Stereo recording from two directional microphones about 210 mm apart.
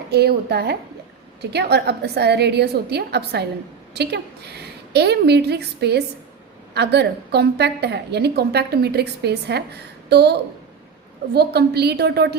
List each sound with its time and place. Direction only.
0.1 s a woman's voice: 50° right (ahead or behind)
11.3 s a woman's voice: 50° right (ahead or behind)